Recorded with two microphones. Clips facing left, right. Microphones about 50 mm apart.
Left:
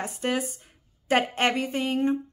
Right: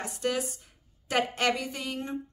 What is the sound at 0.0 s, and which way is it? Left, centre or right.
A woman's voice, left.